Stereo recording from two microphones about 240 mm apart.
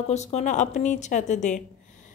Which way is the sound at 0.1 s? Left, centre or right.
Left.